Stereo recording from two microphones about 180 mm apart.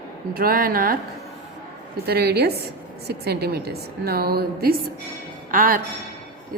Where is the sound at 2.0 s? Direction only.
60° right (ahead or behind).